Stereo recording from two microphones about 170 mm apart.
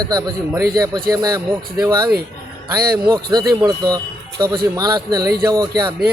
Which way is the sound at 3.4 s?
25° right (ahead or behind).